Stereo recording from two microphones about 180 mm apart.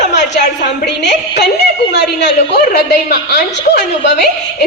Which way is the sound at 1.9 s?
70° left (ahead or behind).